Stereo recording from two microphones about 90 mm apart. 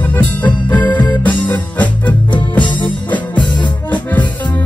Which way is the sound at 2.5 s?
60° left (ahead or behind).